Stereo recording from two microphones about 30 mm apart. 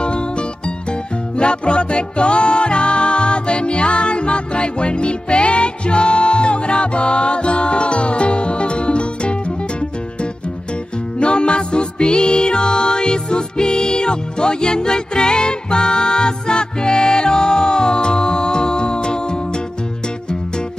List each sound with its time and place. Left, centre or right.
0.0 s music: left
11.1 s music: left